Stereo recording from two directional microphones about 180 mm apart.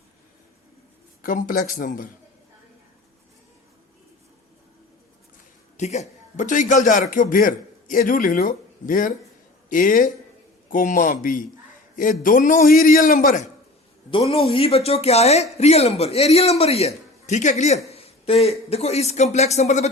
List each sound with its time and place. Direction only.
1.2 s a man's voice: 50° left (ahead or behind)
5.7 s a man's voice: 40° left (ahead or behind)
14.1 s a man's voice: 30° left (ahead or behind)